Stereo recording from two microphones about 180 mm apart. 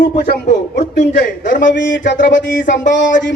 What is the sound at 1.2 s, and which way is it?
Speech, 45° left (ahead or behind).